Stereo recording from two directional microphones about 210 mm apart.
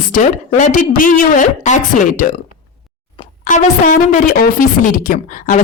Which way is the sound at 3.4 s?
35° left (ahead or behind).